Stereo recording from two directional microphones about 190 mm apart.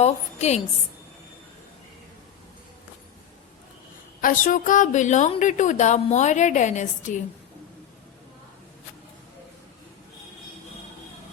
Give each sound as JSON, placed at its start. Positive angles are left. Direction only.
{"t": 0.0, "sound": "a woman's voice", "side_deg": 35}
{"t": 4.2, "sound": "a woman's voice", "side_deg": 45}